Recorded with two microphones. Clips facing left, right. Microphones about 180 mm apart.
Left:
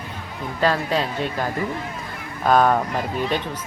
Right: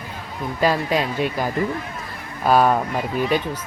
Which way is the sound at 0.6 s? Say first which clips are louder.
Right 1 dB; 10° right (ahead or behind).